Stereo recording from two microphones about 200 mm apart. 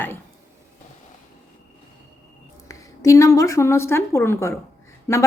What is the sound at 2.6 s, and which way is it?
A woman's voice, 15° left (ahead or behind).